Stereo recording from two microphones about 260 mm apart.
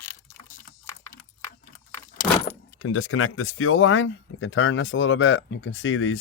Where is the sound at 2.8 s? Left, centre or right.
Left.